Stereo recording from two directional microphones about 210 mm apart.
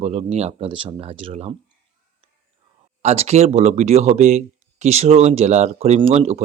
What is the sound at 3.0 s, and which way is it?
Speech, 30° right (ahead or behind).